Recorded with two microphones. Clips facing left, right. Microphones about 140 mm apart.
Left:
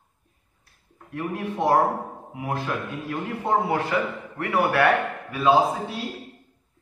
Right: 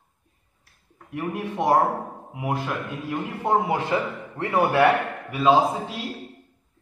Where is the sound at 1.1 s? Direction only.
15° right (ahead or behind).